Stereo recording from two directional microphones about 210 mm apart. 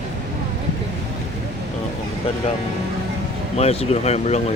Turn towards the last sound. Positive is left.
turn(degrees=30)  # may be behind; listen again after turning